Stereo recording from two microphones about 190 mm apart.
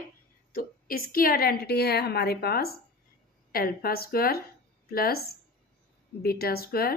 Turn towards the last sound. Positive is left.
turn(degrees=50)  # may be behind; listen again after turning